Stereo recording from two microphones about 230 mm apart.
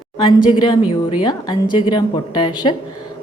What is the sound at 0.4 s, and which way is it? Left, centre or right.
A woman's voice, left.